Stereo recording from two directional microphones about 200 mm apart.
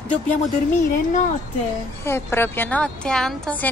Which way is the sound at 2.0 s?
10° left (ahead or behind).